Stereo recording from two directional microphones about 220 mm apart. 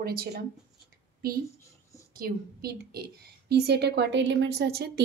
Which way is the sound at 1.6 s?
15° left (ahead or behind).